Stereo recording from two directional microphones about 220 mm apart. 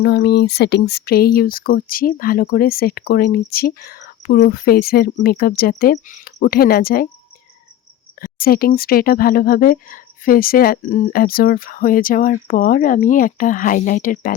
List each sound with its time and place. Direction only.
0.0 s speech: 45° left (ahead or behind)
8.2 s speech: 40° left (ahead or behind)